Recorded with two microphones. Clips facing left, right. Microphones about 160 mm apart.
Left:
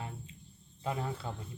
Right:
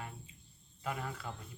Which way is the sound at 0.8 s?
25° left (ahead or behind).